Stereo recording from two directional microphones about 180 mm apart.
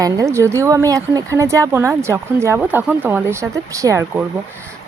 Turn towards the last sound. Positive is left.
turn(degrees=-15)  # may be behind; listen again after turning